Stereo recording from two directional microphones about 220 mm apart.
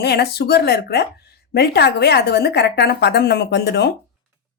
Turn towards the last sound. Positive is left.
turn(degrees=50)  # may be behind; listen again after turning